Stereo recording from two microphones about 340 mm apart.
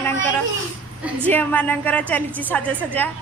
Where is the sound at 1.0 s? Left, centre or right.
Centre.